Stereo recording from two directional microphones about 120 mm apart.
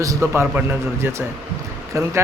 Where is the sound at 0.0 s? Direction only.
25° right (ahead or behind).